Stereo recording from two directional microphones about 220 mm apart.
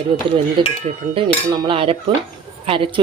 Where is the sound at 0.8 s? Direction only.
25° right (ahead or behind).